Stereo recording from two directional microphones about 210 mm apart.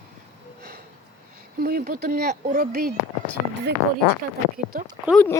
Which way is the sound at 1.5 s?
45° right (ahead or behind).